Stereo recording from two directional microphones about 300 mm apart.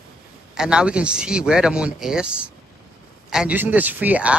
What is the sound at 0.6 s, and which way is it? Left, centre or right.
Speech, centre.